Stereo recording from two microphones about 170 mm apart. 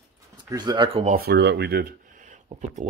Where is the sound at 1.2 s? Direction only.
80° right; by 2.8 s 45° right (ahead or behind).